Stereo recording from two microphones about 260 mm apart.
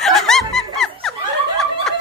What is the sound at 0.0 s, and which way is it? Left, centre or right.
Music, centre.